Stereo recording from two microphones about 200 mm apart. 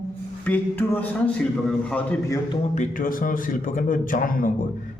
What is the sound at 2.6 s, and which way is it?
A man's voice, 40° left (ahead or behind).